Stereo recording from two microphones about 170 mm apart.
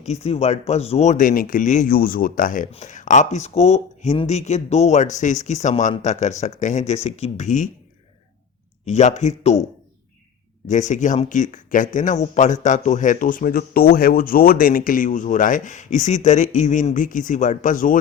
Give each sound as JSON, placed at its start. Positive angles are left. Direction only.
{"t": 0.0, "sound": "speech", "side_deg": 40}
{"t": 8.9, "sound": "speech", "side_deg": 40}
{"t": 10.7, "sound": "speech", "side_deg": 45}